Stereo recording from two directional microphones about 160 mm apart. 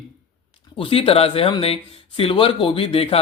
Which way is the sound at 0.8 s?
35° left (ahead or behind).